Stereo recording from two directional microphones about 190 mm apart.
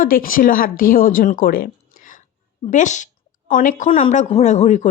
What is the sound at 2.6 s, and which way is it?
Speech, 40° left (ahead or behind).